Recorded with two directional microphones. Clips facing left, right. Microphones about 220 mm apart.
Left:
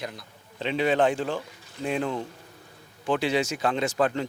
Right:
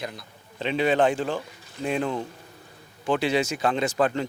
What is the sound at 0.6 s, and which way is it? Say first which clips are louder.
Speech: right 1 dB; 10° right (ahead or behind).